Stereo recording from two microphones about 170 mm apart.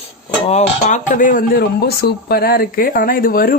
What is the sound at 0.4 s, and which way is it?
Speech, 40° left (ahead or behind).